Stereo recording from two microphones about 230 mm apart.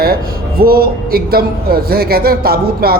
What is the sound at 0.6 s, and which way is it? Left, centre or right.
Speech, right.